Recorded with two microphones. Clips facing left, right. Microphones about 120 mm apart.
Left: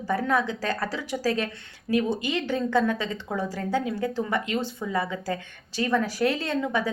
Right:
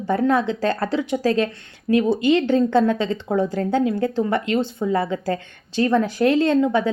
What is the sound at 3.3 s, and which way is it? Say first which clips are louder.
Speech: right 7 dB; 50° right (ahead or behind).